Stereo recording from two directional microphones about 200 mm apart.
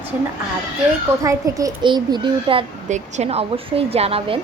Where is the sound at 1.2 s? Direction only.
15° right (ahead or behind).